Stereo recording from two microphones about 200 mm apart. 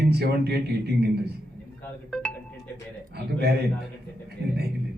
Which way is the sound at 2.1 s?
5° left (ahead or behind).